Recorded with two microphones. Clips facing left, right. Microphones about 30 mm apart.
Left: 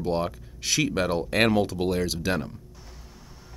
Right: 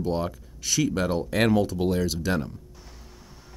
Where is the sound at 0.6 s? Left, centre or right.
Left.